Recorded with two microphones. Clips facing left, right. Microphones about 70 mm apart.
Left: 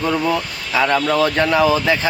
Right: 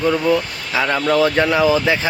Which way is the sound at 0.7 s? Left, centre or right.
Centre.